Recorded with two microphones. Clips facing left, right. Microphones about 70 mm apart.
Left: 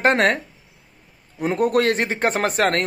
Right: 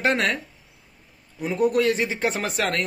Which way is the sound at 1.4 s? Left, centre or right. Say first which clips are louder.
Left 2 dB; left.